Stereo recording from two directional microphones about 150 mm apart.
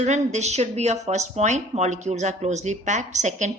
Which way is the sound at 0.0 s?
50° right (ahead or behind).